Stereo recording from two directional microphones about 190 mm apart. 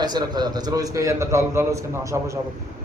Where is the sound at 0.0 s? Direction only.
20° right (ahead or behind).